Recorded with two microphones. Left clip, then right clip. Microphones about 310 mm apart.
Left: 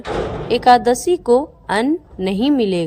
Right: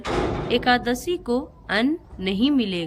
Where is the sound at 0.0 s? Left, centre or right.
Centre.